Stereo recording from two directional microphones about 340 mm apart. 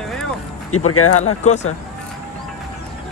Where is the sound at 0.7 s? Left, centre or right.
Left.